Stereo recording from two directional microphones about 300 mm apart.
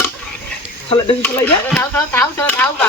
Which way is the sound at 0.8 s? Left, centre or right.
Centre.